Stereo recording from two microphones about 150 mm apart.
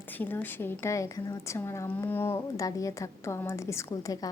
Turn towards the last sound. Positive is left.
turn(degrees=20)  # may be behind; listen again after turning